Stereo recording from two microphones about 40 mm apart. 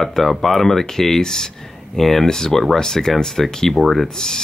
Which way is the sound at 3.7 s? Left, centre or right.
Centre.